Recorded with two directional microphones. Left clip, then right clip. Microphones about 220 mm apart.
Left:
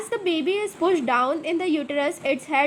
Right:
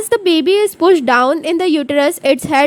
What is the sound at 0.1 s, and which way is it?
A woman's voice, 50° right (ahead or behind).